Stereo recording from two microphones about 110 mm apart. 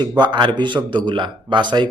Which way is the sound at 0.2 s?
45° right (ahead or behind).